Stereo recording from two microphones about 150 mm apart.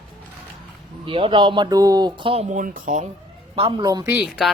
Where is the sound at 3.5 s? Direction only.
35° right (ahead or behind).